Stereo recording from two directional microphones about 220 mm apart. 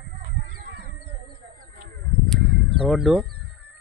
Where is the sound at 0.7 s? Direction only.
50° right (ahead or behind).